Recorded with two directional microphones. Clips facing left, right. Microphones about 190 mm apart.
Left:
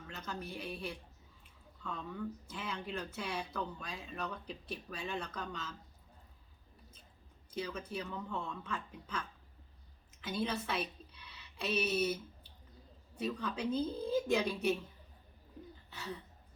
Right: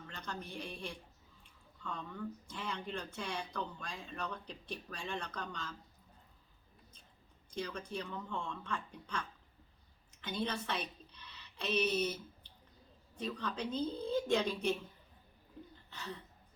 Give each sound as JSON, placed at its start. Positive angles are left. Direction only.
{"t": 0.1, "sound": "speech", "side_deg": 5}
{"t": 7.5, "sound": "a woman's voice", "side_deg": 5}
{"t": 15.9, "sound": "a sound", "side_deg": 10}